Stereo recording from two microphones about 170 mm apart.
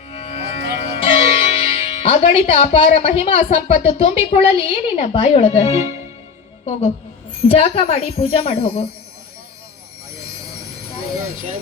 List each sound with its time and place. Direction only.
0.1 s music: 35° left (ahead or behind)
7.4 s speech: 35° left (ahead or behind)